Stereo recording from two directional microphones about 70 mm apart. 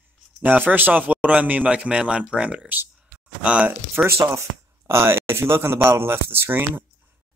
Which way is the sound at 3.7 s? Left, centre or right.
Right.